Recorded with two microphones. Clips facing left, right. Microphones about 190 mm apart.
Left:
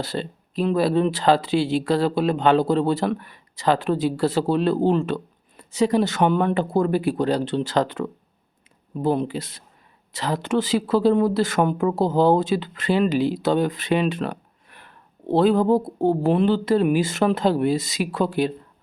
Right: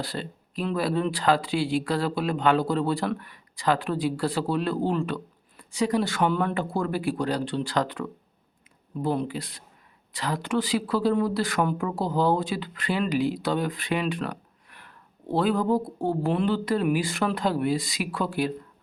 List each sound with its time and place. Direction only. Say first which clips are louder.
0.0 s speech: left 5 dB; 25° left (ahead or behind)